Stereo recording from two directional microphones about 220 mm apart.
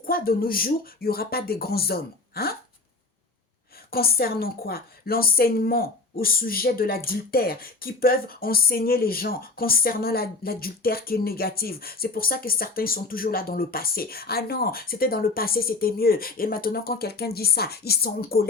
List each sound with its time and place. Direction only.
0.0 s a woman's voice: 40° left (ahead or behind)
3.9 s a woman's voice: 45° left (ahead or behind)